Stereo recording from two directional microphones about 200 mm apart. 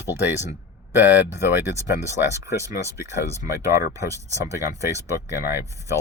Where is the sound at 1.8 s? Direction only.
15° right (ahead or behind).